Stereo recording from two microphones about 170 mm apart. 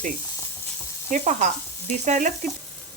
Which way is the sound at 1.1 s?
45° right (ahead or behind).